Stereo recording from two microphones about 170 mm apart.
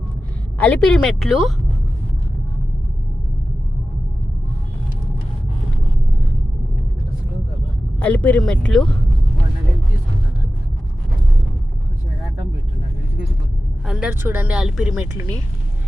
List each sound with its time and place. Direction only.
0.6 s a woman's voice: 5° left (ahead or behind)
7.9 s speech: 10° left (ahead or behind)
13.8 s speech: centre (ahead or behind)
14.1 s speech: 10° right (ahead or behind)
15.1 s speech: 20° right (ahead or behind)